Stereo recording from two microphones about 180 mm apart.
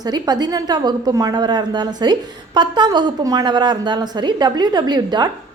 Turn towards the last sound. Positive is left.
turn(degrees=-25)  # may be behind; listen again after turning